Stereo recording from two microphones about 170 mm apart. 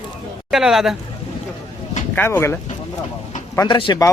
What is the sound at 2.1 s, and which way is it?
Speech, 15° left (ahead or behind).